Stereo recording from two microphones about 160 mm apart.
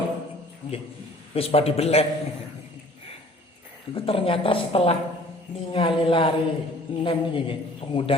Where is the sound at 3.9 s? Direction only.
35° left (ahead or behind).